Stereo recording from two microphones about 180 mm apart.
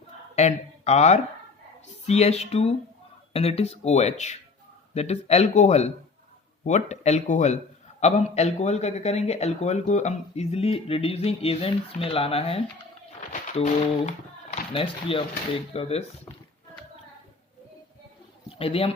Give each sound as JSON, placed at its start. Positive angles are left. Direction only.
{"t": 0.3, "sound": "speech", "side_deg": 40}
{"t": 18.4, "sound": "speech", "side_deg": 30}